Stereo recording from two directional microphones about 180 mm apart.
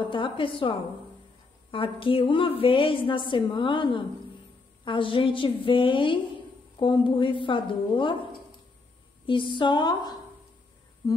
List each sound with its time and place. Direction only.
0.1 s a woman's voice: 30° left (ahead or behind)
9.2 s a woman's voice: 25° left (ahead or behind)